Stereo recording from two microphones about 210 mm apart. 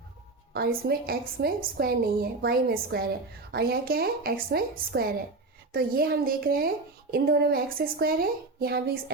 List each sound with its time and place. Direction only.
0.5 s a woman's voice: 45° right (ahead or behind)